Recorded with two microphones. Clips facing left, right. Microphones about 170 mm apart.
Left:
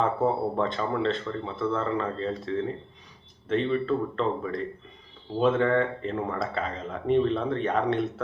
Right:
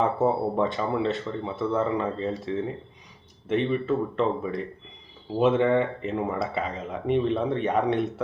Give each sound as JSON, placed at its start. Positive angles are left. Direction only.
{"t": 0.0, "sound": "speech", "side_deg": -15}
{"t": 1.5, "sound": "speech", "side_deg": -15}
{"t": 3.5, "sound": "speech", "side_deg": -10}